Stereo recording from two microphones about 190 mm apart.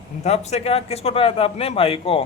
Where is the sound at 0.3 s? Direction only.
35° left (ahead or behind).